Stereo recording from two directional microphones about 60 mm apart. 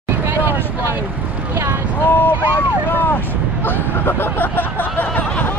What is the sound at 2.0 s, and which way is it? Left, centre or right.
Vehicle, left.